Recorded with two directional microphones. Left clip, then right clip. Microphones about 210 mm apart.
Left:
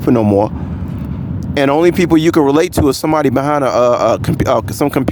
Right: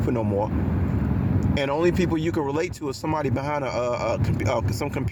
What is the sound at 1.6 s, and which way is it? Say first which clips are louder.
Speech: left 12 dB; 50° left (ahead or behind).